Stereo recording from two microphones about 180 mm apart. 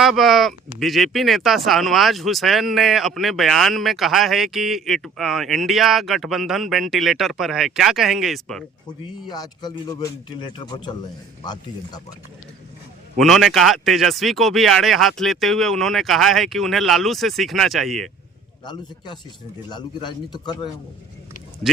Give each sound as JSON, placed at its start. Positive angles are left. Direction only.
{"t": 0.0, "sound": "speech", "side_deg": 0}
{"t": 8.9, "sound": "speech", "side_deg": 20}
{"t": 13.1, "sound": "speech", "side_deg": 0}
{"t": 18.6, "sound": "speech", "side_deg": 25}